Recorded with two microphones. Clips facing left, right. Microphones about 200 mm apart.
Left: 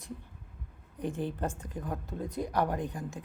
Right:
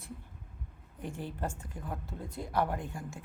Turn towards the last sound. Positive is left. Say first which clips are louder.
# left 5 dB
turn(degrees=20)  # may be behind; listen again after turning